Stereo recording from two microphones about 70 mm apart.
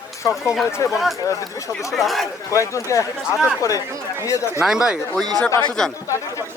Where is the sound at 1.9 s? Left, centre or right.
Centre.